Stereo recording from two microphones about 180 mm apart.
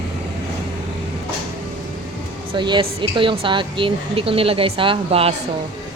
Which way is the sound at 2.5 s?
25° right (ahead or behind).